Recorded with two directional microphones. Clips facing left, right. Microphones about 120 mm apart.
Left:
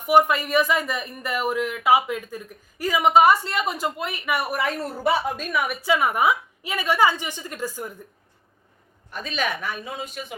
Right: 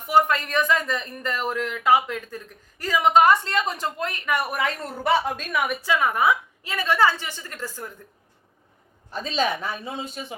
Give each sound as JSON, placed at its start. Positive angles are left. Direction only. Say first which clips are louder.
{"t": 0.1, "sound": "speech", "louder": "left 2 dB", "side_deg": 15}
{"t": 5.8, "sound": "speech", "louder": "left 2 dB", "side_deg": 15}
{"t": 9.1, "sound": "a woman's voice", "louder": "right 3 dB", "side_deg": -30}